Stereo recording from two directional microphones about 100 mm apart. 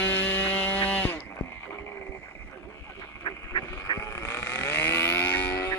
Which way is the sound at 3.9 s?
30° left (ahead or behind).